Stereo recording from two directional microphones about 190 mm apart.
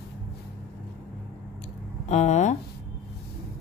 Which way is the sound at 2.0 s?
40° left (ahead or behind).